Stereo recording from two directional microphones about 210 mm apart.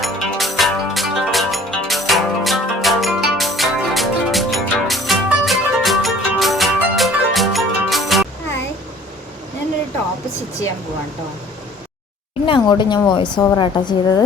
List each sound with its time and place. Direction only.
0.0 s music: centre (ahead or behind)
12.5 s a woman's voice: 20° left (ahead or behind)